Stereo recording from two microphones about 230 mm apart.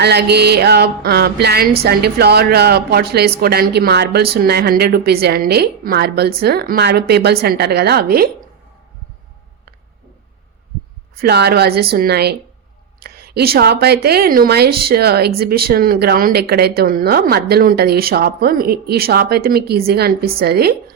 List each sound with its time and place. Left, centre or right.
0.0 s a woman's voice: right
11.2 s a woman's voice: right